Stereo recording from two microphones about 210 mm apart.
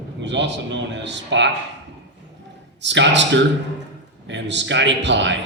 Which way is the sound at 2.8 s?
55° right (ahead or behind).